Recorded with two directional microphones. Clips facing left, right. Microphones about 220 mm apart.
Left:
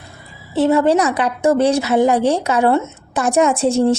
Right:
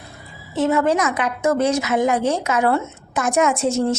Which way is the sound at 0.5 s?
35° left (ahead or behind).